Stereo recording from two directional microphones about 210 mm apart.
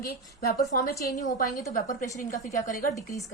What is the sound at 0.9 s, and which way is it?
Speech, 15° left (ahead or behind).